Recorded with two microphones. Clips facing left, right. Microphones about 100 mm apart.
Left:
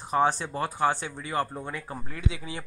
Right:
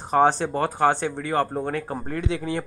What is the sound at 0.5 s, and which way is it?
Speech, 50° right (ahead or behind).